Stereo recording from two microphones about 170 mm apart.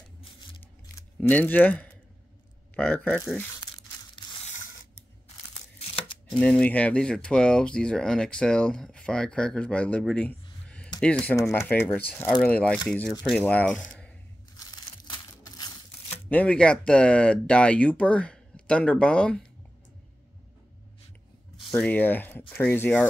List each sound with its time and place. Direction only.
0.9 s speech: 10° left (ahead or behind)
3.6 s crumpling: 25° left (ahead or behind)
6.3 s speech: 5° left (ahead or behind)
14.6 s crumpling: 25° left (ahead or behind)
16.3 s speech: 10° left (ahead or behind)
21.6 s speech: 5° left (ahead or behind)